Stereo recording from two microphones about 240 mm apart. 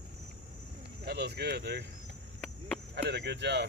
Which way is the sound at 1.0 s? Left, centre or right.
Right.